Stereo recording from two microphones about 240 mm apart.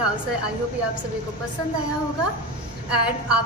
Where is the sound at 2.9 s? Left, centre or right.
Centre.